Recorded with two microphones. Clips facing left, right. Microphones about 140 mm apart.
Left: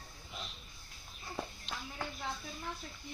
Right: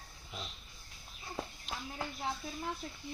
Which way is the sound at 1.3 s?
5° right (ahead or behind).